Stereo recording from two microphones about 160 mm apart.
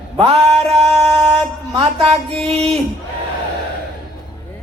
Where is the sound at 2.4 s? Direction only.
40° right (ahead or behind).